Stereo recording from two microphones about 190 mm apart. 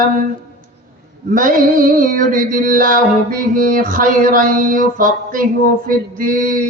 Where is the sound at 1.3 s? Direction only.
45° right (ahead or behind).